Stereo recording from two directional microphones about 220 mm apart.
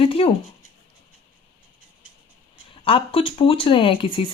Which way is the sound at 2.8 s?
25° left (ahead or behind).